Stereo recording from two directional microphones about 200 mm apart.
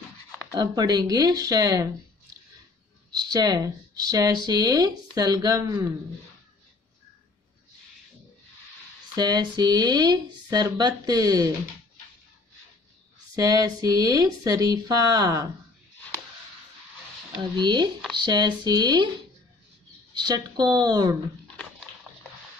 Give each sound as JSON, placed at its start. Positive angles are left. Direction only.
{"t": 0.5, "sound": "speech", "side_deg": -20}
{"t": 3.1, "sound": "speech", "side_deg": -20}
{"t": 9.1, "sound": "speech", "side_deg": -20}
{"t": 13.4, "sound": "speech", "side_deg": -20}
{"t": 17.4, "sound": "speech", "side_deg": -20}
{"t": 20.2, "sound": "speech", "side_deg": -20}